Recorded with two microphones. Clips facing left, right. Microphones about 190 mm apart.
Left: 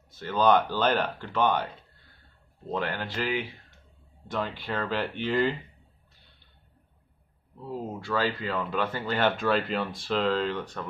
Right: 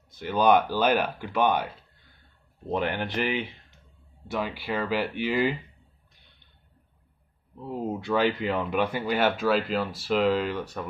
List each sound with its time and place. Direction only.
0.1 s speech: 15° right (ahead or behind)
2.7 s speech: 15° right (ahead or behind)
4.3 s speech: 10° right (ahead or behind)
7.6 s speech: 20° right (ahead or behind)